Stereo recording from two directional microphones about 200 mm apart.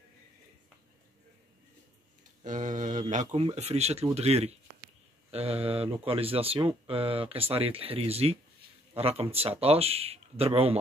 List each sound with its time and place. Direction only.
2.4 s speech: 40° right (ahead or behind)